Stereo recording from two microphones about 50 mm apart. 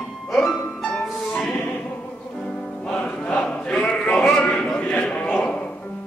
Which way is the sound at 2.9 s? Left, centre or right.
Left.